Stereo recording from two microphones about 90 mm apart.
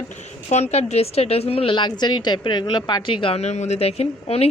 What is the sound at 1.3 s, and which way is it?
Speech, 90° left.